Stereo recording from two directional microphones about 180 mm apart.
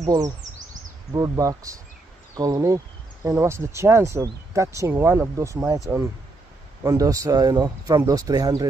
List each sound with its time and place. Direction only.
0.0 s speech: 20° right (ahead or behind)
6.8 s speech: 20° right (ahead or behind)